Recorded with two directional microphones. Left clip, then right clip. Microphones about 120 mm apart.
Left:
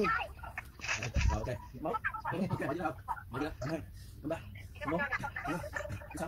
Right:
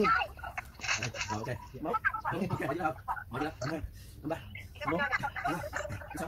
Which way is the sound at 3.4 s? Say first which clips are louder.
Right 2 dB; 25° right (ahead or behind).